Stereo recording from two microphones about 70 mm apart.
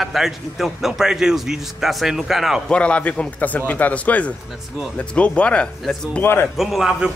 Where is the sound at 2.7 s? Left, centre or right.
Centre.